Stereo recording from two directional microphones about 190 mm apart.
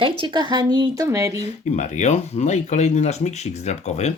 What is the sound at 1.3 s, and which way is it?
Speech, 35° left (ahead or behind).